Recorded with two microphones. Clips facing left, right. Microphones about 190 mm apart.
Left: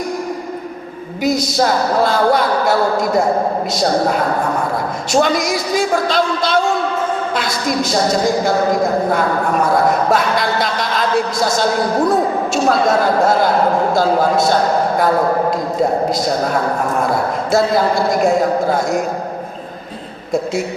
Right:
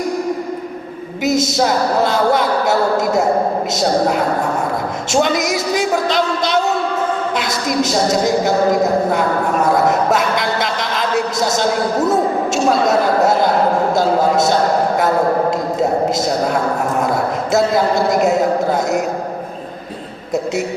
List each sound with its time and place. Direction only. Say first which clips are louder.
1.2 s a woman's voice: even; 20° right (ahead or behind)
5.1 s a woman's voice: left 1 dB; 20° right (ahead or behind)
10.1 s a woman's voice: left 1 dB; 20° right (ahead or behind)
13.9 s a woman's voice: even; 20° right (ahead or behind)
18.2 s a woman's voice: even; 20° right (ahead or behind)